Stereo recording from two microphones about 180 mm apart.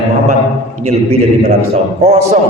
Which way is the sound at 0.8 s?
35° right (ahead or behind).